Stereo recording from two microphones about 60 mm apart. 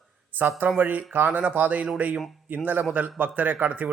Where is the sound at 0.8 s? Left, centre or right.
Right.